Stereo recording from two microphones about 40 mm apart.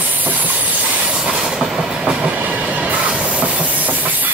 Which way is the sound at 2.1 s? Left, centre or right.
Right.